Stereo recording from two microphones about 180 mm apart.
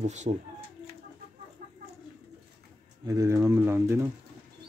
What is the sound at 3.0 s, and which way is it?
Speech, 20° right (ahead or behind).